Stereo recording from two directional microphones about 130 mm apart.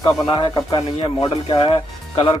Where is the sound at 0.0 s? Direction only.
35° left (ahead or behind).